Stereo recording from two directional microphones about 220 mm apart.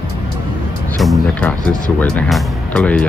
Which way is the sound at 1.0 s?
Centre (ahead or behind).